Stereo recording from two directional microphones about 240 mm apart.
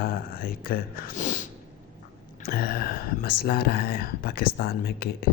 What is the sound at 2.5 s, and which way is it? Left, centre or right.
A man's voice, left.